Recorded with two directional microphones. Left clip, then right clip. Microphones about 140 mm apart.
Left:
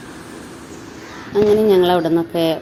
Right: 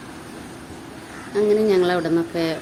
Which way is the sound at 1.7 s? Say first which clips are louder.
Left 5 dB; 15° left (ahead or behind).